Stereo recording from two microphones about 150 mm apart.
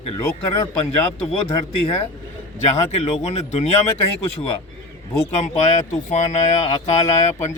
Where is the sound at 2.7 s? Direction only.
45° left (ahead or behind).